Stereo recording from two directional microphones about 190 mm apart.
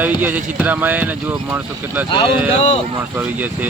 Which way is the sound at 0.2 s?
10° right (ahead or behind).